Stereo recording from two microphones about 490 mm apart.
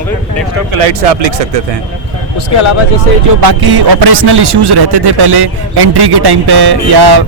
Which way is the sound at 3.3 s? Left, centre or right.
Right.